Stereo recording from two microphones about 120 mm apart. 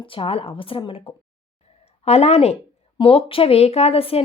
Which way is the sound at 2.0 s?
60° left (ahead or behind).